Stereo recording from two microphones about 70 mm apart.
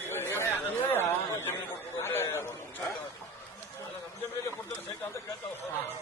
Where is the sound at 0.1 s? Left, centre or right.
Left.